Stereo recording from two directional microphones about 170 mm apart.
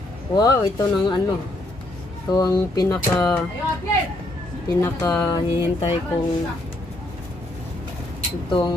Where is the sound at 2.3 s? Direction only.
20° left (ahead or behind).